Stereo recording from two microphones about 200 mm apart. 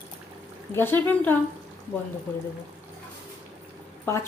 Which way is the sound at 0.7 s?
10° left (ahead or behind).